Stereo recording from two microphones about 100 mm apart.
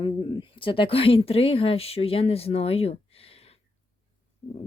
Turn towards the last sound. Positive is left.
turn(degrees=85)